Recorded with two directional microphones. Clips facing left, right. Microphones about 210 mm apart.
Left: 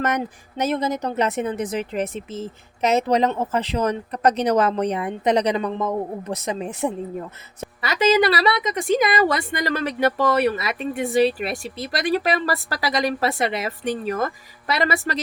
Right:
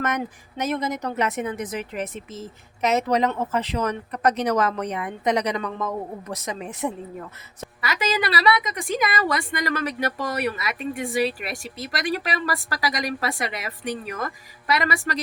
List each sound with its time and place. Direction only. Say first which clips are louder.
0.0 s a woman's voice: left 3 dB; 35° left (ahead or behind)